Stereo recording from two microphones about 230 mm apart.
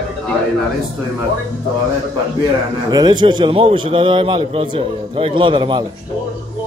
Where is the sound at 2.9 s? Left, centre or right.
Centre.